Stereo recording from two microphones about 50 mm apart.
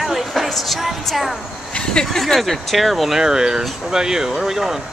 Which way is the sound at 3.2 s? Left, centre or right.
Centre.